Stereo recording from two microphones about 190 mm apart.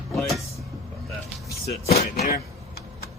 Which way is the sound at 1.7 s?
35° left (ahead or behind).